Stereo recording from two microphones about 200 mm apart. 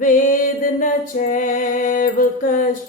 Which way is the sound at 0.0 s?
40° left (ahead or behind).